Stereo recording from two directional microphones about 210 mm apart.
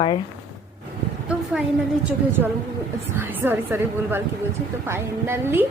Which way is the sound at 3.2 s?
10° right (ahead or behind).